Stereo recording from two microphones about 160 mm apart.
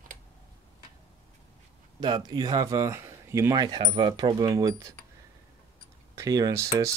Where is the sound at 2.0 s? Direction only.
25° right (ahead or behind).